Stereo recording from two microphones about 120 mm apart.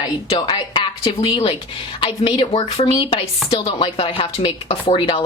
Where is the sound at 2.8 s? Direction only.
35° left (ahead or behind).